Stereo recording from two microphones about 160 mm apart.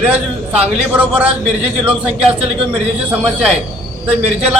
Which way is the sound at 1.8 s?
35° right (ahead or behind).